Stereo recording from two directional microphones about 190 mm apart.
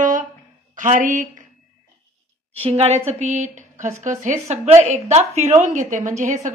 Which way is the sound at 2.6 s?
30° right (ahead or behind).